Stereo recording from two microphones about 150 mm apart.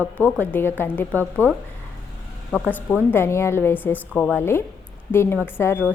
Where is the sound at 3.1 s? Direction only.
15° left (ahead or behind).